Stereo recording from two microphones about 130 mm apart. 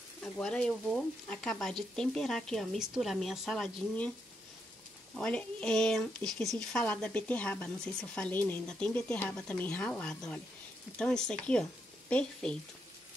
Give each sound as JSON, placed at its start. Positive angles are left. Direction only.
{"t": 0.2, "sound": "speech", "side_deg": 5}
{"t": 5.1, "sound": "speech", "side_deg": 10}